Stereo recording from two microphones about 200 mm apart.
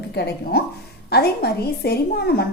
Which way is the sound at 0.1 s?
55° left (ahead or behind).